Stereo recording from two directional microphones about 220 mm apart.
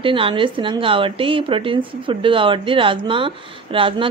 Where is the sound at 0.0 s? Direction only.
25° right (ahead or behind).